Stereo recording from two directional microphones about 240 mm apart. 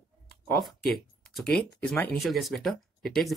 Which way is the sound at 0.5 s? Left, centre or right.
Centre.